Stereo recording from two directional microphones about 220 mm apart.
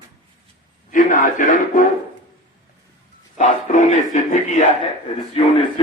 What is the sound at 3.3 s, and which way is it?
Bow-wow, 35° left (ahead or behind).